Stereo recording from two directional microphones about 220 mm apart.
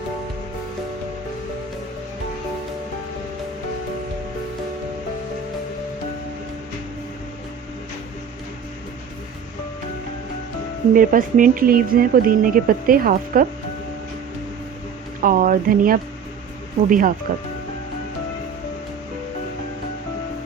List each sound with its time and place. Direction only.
10.9 s speech: 35° right (ahead or behind)
15.2 s speech: 40° right (ahead or behind)